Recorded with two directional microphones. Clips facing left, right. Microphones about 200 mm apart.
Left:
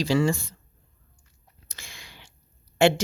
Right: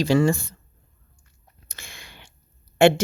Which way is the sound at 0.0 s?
55° right (ahead or behind).